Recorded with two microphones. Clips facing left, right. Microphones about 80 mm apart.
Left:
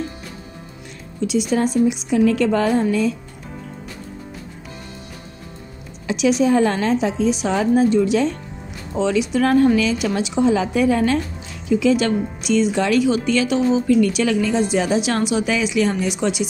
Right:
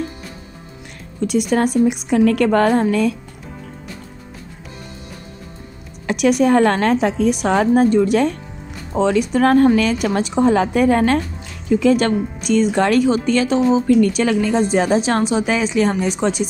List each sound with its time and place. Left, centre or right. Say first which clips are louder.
1.2 s a woman's voice: right 2 dB; right
6.0 s a woman's voice: right 2 dB; right